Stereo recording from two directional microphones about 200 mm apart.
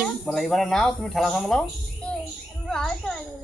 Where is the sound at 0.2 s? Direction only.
Centre (ahead or behind).